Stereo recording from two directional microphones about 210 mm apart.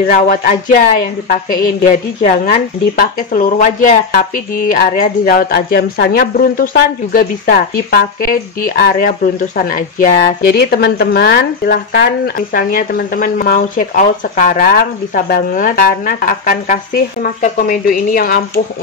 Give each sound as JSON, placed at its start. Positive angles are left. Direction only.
{"t": 0.0, "sound": "speech", "side_deg": 40}